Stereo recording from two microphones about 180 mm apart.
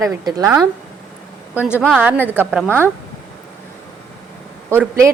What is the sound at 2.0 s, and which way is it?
Speech, 10° right (ahead or behind).